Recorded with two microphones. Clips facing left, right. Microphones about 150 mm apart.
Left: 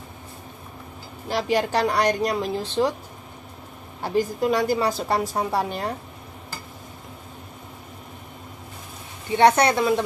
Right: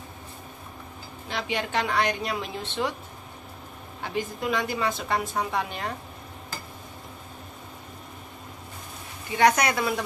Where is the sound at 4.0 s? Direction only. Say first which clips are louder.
Left 8 dB; 40° left (ahead or behind).